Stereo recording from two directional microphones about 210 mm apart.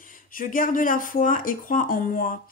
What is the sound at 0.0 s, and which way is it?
Speech, 40° left (ahead or behind).